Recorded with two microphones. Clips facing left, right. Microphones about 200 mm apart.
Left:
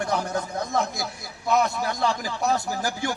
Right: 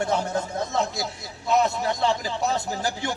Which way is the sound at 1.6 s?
25° right (ahead or behind).